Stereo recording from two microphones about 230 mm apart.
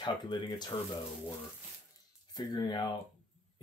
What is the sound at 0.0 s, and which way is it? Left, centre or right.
Speech, centre.